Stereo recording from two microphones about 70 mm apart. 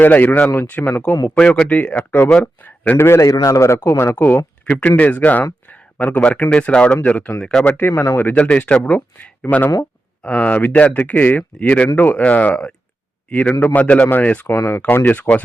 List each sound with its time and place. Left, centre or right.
0.0 s speech: left
1.4 s speech: centre
1.7 s speech: left
3.0 s a man's voice: left
3.2 s a man's voice: left
3.8 s a man's voice: left
4.1 s speech: left
7.8 s a man's voice: left
8.2 s speech: centre
13.7 s speech: left
14.5 s a man's voice: left
15.0 s speech: left